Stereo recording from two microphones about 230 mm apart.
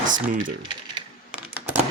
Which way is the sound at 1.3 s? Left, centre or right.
Centre.